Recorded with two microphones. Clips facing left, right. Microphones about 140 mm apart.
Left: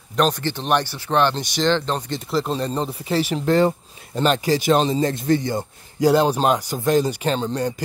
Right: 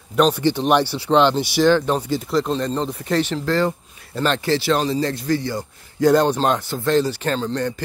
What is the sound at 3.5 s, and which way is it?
Speech, 20° left (ahead or behind).